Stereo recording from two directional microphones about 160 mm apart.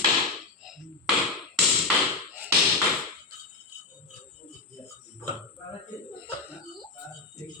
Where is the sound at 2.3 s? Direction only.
10° right (ahead or behind).